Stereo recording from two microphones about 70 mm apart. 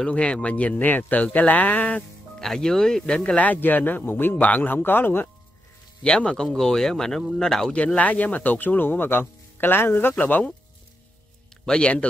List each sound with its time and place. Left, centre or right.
0.0 s speech: centre
2.4 s speech: centre
3.2 s speech: left
6.0 s speech: centre
7.8 s speech: left
11.6 s speech: centre